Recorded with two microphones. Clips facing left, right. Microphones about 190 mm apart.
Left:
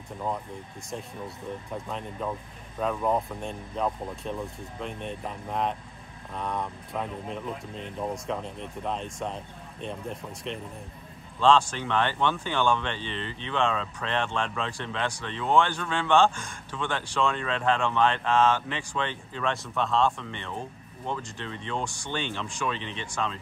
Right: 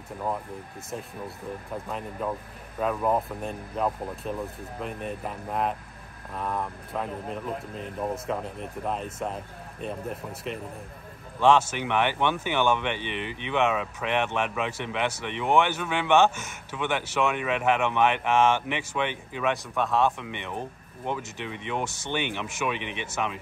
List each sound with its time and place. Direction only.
0.8 s speech: 5° right (ahead or behind); by 16.3 s 20° right (ahead or behind)
16.3 s speech: 5° right (ahead or behind)